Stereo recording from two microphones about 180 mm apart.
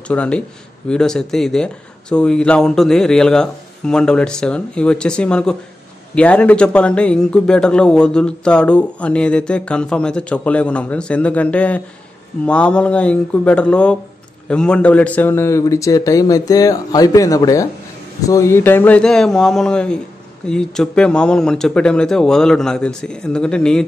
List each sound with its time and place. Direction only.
0.1 s speech: 5° left (ahead or behind)